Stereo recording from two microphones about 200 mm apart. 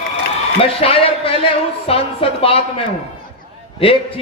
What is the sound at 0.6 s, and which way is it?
A man's voice, 30° left (ahead or behind).